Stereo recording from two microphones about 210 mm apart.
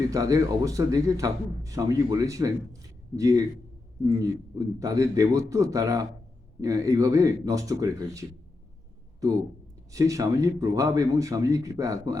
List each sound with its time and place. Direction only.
0.1 s a man's voice: 15° right (ahead or behind)
9.9 s a man's voice: 15° right (ahead or behind)